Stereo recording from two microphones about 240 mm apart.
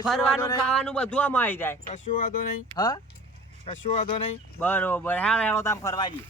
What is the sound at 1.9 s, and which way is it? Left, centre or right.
Speech, left.